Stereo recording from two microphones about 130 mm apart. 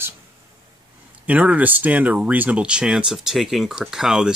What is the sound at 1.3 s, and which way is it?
Speech, 10° right (ahead or behind).